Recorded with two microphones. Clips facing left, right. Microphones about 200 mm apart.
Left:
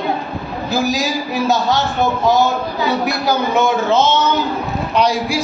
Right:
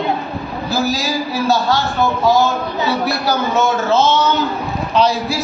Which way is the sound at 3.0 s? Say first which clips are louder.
Left 1 dB; 15° left (ahead or behind).